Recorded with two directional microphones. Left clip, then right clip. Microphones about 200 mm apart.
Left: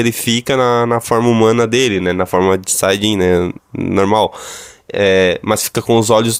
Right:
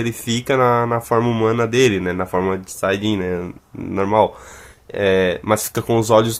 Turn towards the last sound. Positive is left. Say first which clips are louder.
# left 3 dB
turn(degrees=35)  # may be behind; listen again after turning